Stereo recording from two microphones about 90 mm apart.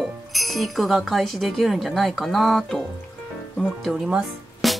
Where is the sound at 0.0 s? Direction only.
Centre (ahead or behind).